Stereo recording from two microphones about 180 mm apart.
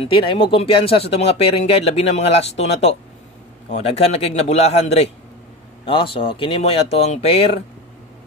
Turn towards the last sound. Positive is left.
turn(degrees=35)  # may be behind; listen again after turning